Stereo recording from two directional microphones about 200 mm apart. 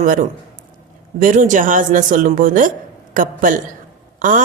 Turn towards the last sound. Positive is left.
turn(degrees=-40)  # may be behind; listen again after turning